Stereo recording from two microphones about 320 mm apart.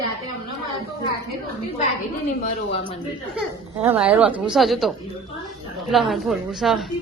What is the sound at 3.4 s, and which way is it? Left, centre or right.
A woman's voice, centre.